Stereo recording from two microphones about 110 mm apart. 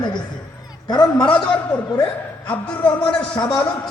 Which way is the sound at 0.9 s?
45° left (ahead or behind).